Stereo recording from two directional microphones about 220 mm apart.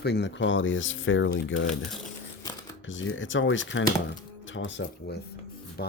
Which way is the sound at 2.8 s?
60° left (ahead or behind).